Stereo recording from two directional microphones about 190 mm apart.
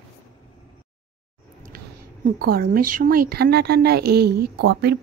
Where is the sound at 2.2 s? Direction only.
55° right (ahead or behind).